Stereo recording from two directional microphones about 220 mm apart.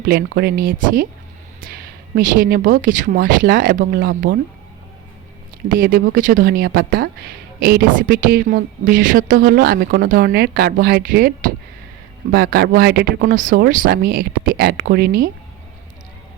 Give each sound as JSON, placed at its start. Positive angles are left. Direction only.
{"t": 0.0, "sound": "speech", "side_deg": -45}
{"t": 5.6, "sound": "speech", "side_deg": -40}